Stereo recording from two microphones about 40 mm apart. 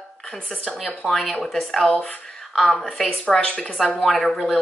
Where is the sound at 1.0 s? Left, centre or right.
Left.